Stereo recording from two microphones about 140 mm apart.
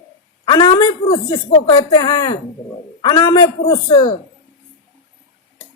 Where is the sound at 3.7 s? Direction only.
40° left (ahead or behind).